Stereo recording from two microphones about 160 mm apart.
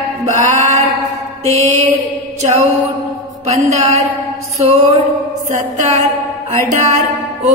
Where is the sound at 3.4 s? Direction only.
40° right (ahead or behind).